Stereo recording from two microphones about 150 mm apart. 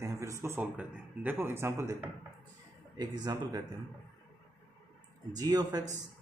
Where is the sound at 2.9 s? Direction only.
25° right (ahead or behind).